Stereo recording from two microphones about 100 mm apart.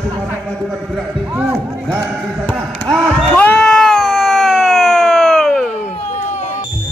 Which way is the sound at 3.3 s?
10° left (ahead or behind).